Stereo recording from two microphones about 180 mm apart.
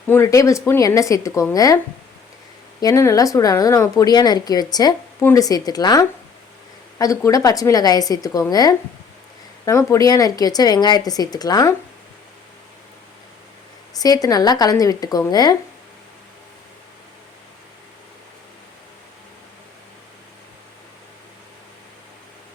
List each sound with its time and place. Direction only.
0.1 s speech: 15° left (ahead or behind)
2.8 s speech: 15° left (ahead or behind)
13.9 s speech: 20° left (ahead or behind)